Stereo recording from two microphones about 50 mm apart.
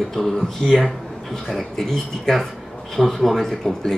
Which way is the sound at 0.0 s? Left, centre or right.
Centre.